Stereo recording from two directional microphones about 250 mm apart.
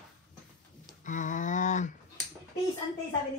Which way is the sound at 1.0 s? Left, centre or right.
Left.